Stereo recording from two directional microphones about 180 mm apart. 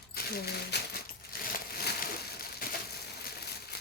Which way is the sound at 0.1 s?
60° left (ahead or behind).